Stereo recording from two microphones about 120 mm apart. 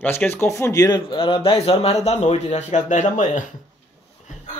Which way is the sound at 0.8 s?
45° left (ahead or behind).